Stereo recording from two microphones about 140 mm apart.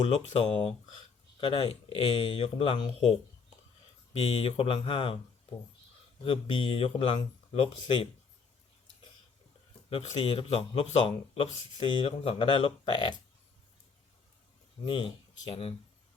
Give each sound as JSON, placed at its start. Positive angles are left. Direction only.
{"t": 1.4, "sound": "speech", "side_deg": 35}
{"t": 4.2, "sound": "speech", "side_deg": 45}
{"t": 6.2, "sound": "a man's voice", "side_deg": 40}
{"t": 9.9, "sound": "a man's voice", "side_deg": 50}
{"t": 14.8, "sound": "speech", "side_deg": 35}